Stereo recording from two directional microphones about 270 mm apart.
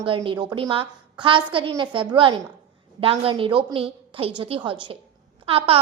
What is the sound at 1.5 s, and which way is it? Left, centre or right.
A woman's voice, centre.